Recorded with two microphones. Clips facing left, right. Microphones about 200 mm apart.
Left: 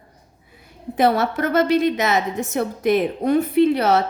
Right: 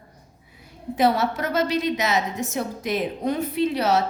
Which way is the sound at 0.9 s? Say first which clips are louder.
Left 3 dB; 55° left (ahead or behind).